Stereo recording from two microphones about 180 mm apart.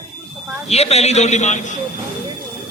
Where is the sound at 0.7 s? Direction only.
35° left (ahead or behind).